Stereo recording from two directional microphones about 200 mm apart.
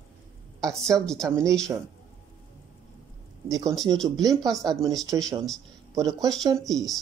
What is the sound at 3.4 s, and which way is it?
Speech, 15° right (ahead or behind).